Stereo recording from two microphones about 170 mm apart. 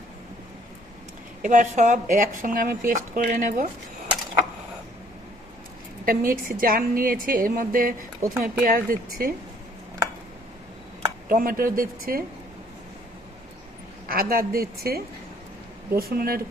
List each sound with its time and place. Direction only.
1.4 s speech: 50° right (ahead or behind)
6.1 s a woman's voice: 55° right (ahead or behind)
8.2 s speech: 15° right (ahead or behind)
8.6 s a woman's voice: 55° right (ahead or behind)
11.3 s a woman's voice: 55° right (ahead or behind)
14.1 s a woman's voice: 60° right (ahead or behind)